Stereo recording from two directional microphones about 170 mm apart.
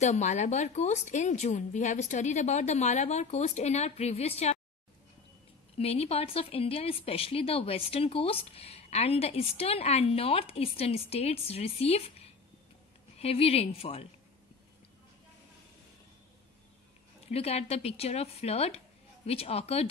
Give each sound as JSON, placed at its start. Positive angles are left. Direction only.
{"t": 0.0, "sound": "speech", "side_deg": 45}
{"t": 5.8, "sound": "speech", "side_deg": 35}
{"t": 17.3, "sound": "speech", "side_deg": 35}